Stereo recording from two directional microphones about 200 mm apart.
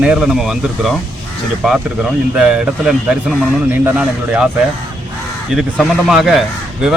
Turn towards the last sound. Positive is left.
turn(degrees=0)  # may be behind; listen again after turning